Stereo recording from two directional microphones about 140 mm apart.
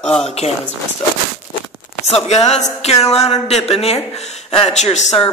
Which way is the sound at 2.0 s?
50° left (ahead or behind).